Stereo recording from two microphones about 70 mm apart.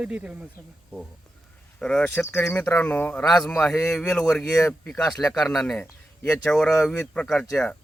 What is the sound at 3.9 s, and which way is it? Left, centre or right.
Speech, centre.